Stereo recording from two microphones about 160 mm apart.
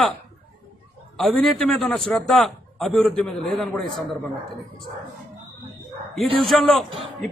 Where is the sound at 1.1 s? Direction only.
Centre (ahead or behind).